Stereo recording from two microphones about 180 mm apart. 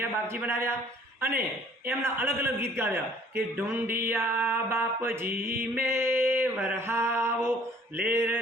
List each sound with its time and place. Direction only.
0.0 s a man's voice: 10° right (ahead or behind)
1.3 s speech: 55° right (ahead or behind)
1.9 s a man's voice: 10° right (ahead or behind)